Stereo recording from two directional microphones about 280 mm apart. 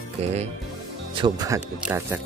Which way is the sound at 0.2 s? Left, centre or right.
Right.